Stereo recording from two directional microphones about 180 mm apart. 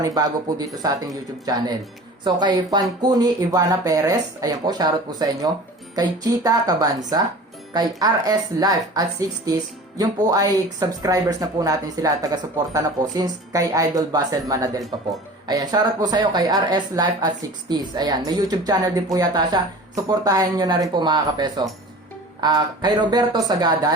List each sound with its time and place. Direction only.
0.0 s speech: 20° right (ahead or behind)